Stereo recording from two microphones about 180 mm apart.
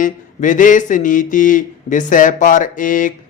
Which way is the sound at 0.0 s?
45° left (ahead or behind).